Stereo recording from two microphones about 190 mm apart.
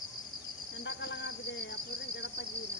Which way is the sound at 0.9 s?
70° left (ahead or behind).